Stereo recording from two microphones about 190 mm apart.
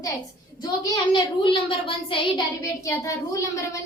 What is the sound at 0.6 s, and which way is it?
Speech, 25° left (ahead or behind).